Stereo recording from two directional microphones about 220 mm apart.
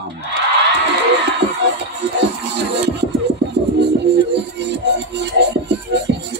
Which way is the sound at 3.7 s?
50° right (ahead or behind).